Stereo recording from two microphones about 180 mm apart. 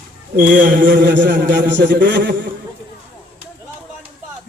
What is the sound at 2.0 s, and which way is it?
Speech, 55° right (ahead or behind).